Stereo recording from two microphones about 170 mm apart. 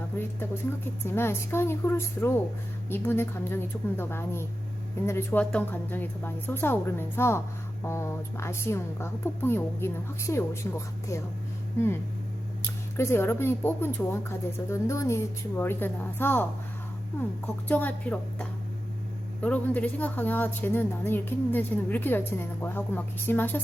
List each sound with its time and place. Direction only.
1.0 s a woman's voice: 15° left (ahead or behind)
13.0 s a woman's voice: 15° left (ahead or behind)